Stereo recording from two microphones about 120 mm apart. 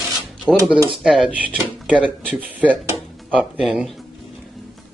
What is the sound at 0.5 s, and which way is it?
Speech, 10° left (ahead or behind).